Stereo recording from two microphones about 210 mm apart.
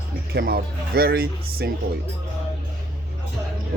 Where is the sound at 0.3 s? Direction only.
45° right (ahead or behind).